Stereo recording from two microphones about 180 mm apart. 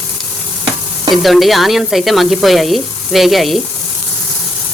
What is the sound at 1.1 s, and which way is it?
Speech, centre (ahead or behind).